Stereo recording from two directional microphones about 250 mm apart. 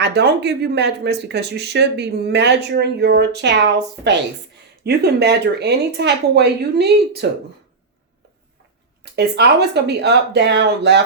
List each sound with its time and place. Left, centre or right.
0.0 s speech: right
9.1 s speech: right